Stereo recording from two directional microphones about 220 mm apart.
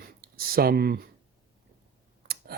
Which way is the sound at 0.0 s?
45° right (ahead or behind).